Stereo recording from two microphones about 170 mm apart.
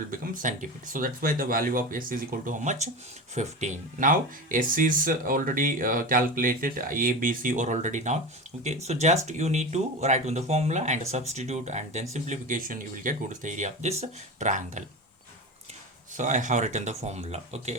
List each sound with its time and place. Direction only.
0.1 s speech: 50° right (ahead or behind)
16.1 s speech: 45° right (ahead or behind)